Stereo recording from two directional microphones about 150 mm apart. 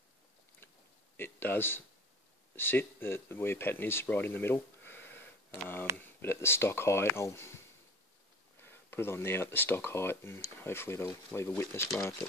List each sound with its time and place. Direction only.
1.1 s speech: 15° left (ahead or behind)
8.6 s speech: 15° left (ahead or behind)